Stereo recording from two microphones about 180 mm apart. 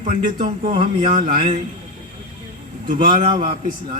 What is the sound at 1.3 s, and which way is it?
Speech, 45° right (ahead or behind).